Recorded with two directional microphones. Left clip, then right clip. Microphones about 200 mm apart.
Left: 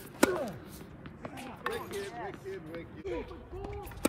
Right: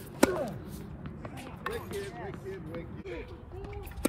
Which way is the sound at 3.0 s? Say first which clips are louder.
Left 3 dB; 55° left (ahead or behind).